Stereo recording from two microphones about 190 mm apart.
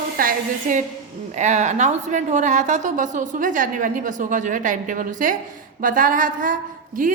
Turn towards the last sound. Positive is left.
turn(degrees=-45)  # may be behind; listen again after turning